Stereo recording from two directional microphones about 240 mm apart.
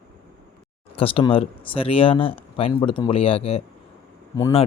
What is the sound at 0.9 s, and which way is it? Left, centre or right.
Speech, left.